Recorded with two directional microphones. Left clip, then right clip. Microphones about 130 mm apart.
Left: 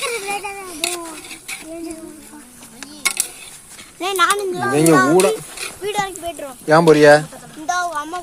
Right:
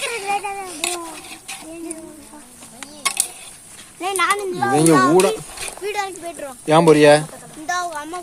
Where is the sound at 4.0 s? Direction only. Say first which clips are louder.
Left 2 dB; 40° left (ahead or behind).